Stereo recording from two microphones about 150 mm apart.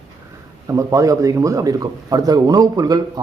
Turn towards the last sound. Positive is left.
turn(degrees=-25)  # may be behind; listen again after turning